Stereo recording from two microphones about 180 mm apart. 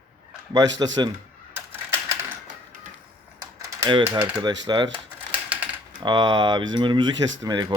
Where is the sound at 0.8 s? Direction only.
25° right (ahead or behind).